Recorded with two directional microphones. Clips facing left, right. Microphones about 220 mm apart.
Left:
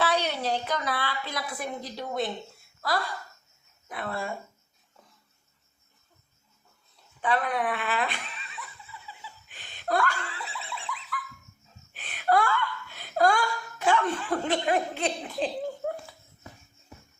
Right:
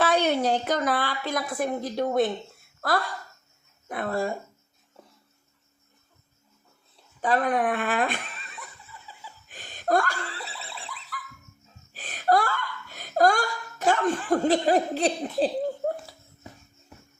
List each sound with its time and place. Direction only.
0.0 s a woman's voice: 50° right (ahead or behind)
3.8 s speech: 45° right (ahead or behind)
7.2 s laughter: 40° right (ahead or behind)
11.9 s speech: 40° right (ahead or behind)